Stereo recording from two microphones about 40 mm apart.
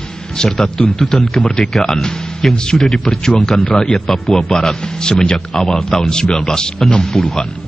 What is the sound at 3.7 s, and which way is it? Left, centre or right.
Speech, centre.